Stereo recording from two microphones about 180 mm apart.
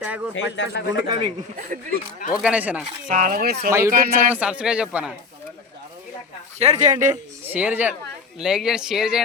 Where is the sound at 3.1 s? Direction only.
50° right (ahead or behind).